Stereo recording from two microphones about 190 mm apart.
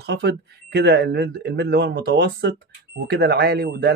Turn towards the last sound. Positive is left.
turn(degrees=-55)  # may be behind; listen again after turning